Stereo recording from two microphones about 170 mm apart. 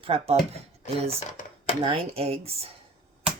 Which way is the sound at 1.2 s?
50° left (ahead or behind).